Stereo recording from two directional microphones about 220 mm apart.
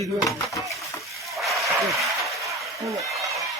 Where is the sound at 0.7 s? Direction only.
Centre (ahead or behind).